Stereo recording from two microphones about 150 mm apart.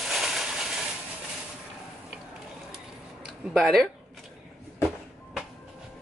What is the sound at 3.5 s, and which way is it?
Speech, centre (ahead or behind).